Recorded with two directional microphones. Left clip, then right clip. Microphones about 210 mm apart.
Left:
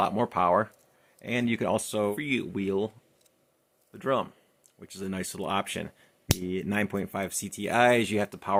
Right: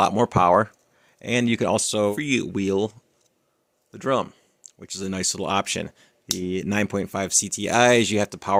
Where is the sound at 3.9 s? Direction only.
45° right (ahead or behind).